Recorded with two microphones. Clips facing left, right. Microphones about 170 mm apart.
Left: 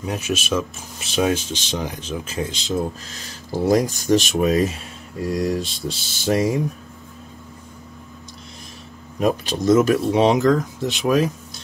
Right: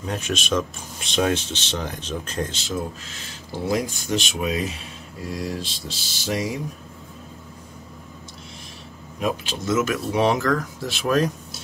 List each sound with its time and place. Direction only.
0.0 s speech: 10° left (ahead or behind)
2.7 s speech: 40° left (ahead or behind)
5.9 s speech: 55° left (ahead or behind)
9.2 s speech: 40° left (ahead or behind); by 11.3 s 10° left (ahead or behind)